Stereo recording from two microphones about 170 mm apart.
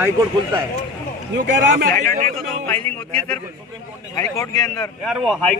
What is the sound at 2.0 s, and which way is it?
Speech, 45° right (ahead or behind).